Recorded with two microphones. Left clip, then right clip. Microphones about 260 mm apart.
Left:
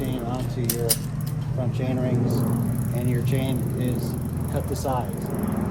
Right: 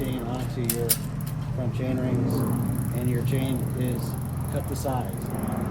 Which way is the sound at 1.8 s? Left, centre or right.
Centre.